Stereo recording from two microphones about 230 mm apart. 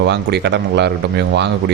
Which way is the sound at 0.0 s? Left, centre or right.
Right.